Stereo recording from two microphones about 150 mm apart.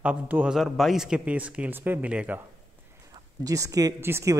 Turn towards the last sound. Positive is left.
turn(degrees=-15)  # may be behind; listen again after turning